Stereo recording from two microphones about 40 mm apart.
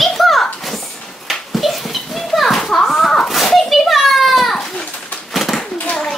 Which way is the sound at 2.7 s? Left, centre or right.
Centre.